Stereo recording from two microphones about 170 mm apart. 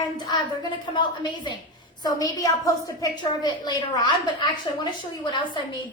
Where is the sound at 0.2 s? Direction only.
25° left (ahead or behind).